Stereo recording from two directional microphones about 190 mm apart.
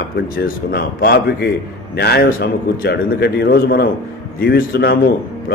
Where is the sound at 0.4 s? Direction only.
55° left (ahead or behind).